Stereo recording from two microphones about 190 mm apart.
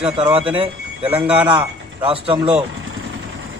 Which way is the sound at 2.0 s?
30° right (ahead or behind).